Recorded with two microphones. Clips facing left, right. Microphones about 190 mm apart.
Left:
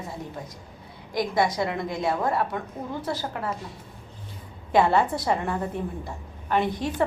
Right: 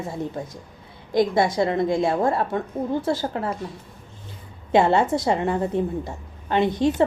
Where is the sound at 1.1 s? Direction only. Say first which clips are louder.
Right 5 dB; 25° right (ahead or behind).